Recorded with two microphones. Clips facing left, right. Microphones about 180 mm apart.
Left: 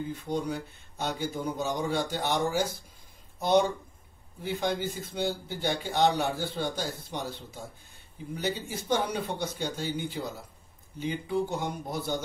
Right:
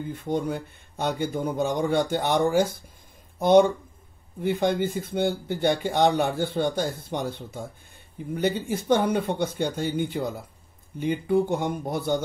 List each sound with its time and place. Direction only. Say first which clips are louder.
0.1 s speech: right 8 dB; 55° right (ahead or behind)